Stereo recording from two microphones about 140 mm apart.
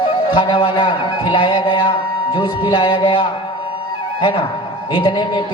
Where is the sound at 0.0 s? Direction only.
35° left (ahead or behind).